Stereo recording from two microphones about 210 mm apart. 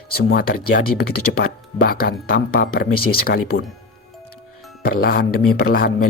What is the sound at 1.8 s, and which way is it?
Speech, 45° left (ahead or behind).